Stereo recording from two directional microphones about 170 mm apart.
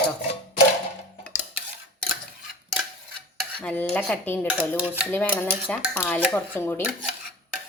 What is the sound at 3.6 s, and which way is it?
Speech, 10° left (ahead or behind).